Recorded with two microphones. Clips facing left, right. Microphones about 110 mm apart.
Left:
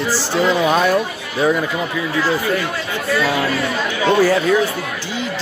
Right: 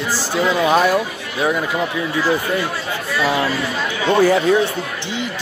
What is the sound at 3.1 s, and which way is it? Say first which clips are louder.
Speech: right 1 dB; 15° right (ahead or behind).